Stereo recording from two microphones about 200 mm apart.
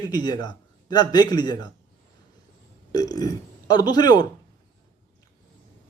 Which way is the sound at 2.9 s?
20° left (ahead or behind).